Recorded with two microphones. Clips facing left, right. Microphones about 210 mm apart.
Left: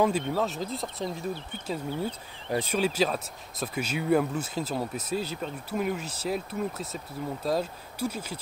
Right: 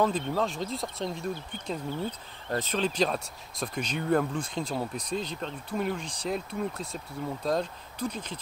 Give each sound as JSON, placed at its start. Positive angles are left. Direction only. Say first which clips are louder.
{"t": 0.0, "sound": "speech", "louder": "left 1 dB", "side_deg": 10}